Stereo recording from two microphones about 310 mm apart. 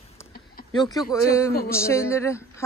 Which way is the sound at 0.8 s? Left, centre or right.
Centre.